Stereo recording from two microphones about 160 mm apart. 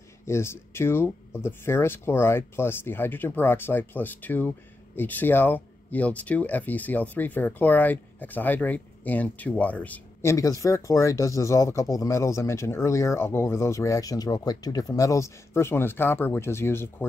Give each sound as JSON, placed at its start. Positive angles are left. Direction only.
{"t": 0.2, "sound": "speech", "side_deg": 15}
{"t": 10.3, "sound": "speech", "side_deg": 20}